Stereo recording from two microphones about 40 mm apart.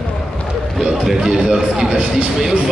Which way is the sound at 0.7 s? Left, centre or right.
Centre.